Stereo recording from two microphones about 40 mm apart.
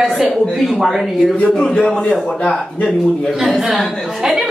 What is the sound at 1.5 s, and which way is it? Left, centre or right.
Speech, centre.